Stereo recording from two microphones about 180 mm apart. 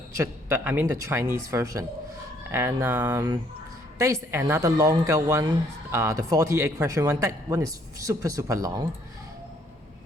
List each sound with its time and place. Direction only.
0.2 s a woman's voice: 10° right (ahead or behind)